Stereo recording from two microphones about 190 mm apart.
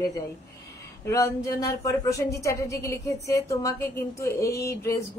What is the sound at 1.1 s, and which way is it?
Speech, 15° left (ahead or behind).